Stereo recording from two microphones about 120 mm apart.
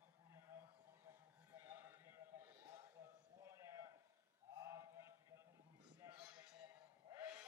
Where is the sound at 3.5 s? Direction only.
20° right (ahead or behind).